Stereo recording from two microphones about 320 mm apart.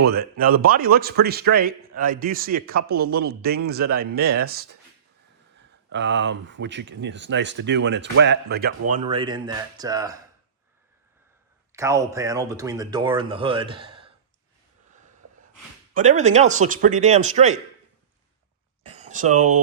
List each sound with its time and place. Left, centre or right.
0.0 s a man's voice: right
5.9 s speech: right
8.9 s speech: centre
11.7 s speech: centre
16.0 s a man's voice: right
18.8 s a sound: right